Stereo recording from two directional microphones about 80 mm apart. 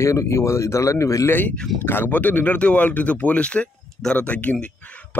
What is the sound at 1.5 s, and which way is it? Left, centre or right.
Speech, centre.